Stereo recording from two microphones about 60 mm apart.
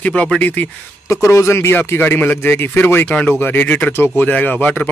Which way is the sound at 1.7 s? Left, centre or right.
Left.